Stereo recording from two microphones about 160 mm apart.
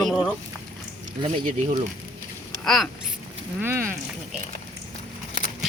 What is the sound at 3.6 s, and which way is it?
Speech, 15° right (ahead or behind).